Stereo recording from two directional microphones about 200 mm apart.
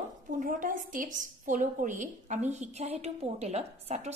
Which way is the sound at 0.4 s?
40° right (ahead or behind).